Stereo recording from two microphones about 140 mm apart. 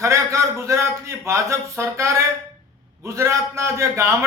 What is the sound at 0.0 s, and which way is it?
A man's voice, 20° right (ahead or behind).